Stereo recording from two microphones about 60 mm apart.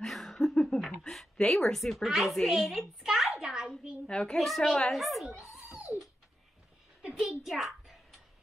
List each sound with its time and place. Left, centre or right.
0.0 s speech: centre
2.0 s a child's voice: centre
4.1 s a child's voice: centre
4.4 s a woman's voice: centre
5.4 s dog: centre
7.2 s a sound: centre